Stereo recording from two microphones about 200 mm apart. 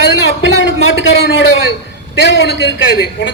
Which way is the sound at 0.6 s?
70° left (ahead or behind).